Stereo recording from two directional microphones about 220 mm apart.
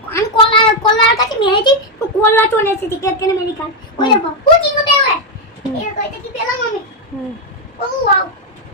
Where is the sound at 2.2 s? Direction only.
10° left (ahead or behind).